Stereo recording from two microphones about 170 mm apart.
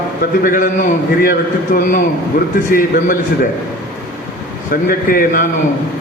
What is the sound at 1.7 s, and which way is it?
A man's voice, 55° left (ahead or behind).